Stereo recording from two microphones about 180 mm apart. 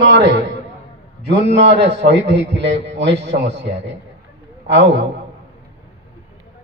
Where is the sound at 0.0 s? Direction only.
75° right (ahead or behind).